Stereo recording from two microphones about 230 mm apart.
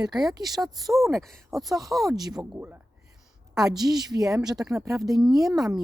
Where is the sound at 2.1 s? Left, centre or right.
Centre.